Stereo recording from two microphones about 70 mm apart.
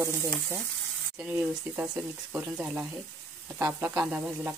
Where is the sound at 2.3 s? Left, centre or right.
Centre.